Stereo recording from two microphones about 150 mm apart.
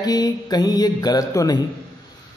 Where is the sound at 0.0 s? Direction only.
25° left (ahead or behind).